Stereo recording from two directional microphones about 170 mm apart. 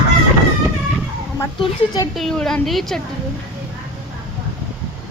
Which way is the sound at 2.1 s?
Centre (ahead or behind).